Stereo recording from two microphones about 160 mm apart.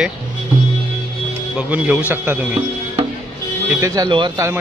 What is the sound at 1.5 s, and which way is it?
A man's voice, 10° right (ahead or behind).